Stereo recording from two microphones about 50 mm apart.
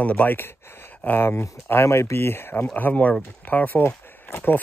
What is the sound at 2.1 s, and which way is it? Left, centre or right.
Speech, left.